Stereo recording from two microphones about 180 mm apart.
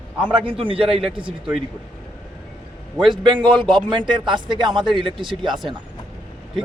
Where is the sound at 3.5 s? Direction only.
Centre (ahead or behind).